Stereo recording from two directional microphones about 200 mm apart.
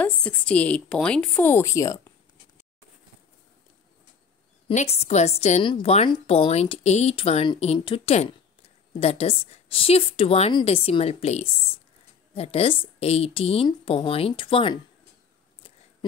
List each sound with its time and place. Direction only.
0.0 s a woman's voice: 5° left (ahead or behind)
4.6 s a woman's voice: 30° left (ahead or behind)